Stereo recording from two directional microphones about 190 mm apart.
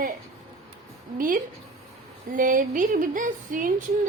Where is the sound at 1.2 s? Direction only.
45° right (ahead or behind).